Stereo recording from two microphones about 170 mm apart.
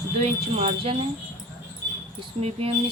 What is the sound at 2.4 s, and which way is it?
Speech, 35° right (ahead or behind).